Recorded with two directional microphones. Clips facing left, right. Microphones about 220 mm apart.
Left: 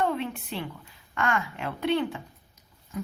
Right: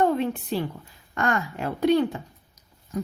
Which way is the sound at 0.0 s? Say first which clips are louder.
Right 6 dB; 40° right (ahead or behind).